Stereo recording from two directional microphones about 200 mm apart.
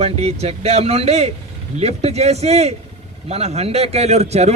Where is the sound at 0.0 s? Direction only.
30° right (ahead or behind).